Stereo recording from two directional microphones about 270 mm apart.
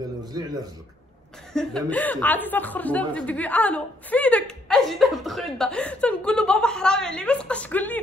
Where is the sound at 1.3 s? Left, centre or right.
Centre.